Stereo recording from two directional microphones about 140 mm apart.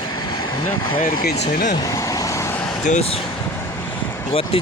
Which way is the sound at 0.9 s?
90° left.